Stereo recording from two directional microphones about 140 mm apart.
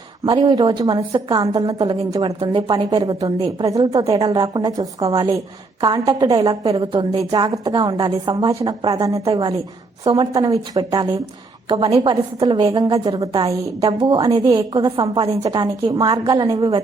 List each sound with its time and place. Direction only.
0.3 s a woman's voice: 40° right (ahead or behind)
2.4 s a woman's voice: 35° right (ahead or behind)
6.7 s a woman's voice: 40° right (ahead or behind)
7.0 s a woman's voice: 30° right (ahead or behind)
9.3 s a woman's voice: 35° right (ahead or behind)